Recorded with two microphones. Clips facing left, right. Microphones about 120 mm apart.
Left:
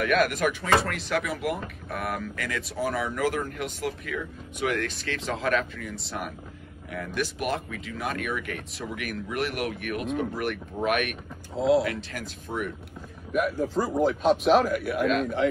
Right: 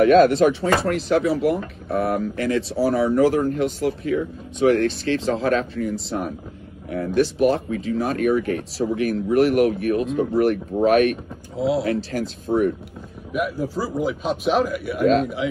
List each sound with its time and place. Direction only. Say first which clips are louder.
0.0 s speech: right 10 dB; 30° right (ahead or behind)
11.5 s speech: even; centre (ahead or behind)
11.8 s speech: right 8 dB; 35° right (ahead or behind)
13.3 s speech: right 1 dB; 5° right (ahead or behind)